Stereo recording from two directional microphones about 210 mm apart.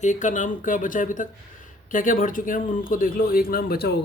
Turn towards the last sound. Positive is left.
turn(degrees=45)  # may be behind; listen again after turning